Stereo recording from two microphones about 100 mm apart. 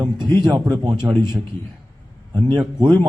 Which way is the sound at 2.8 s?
45° right (ahead or behind).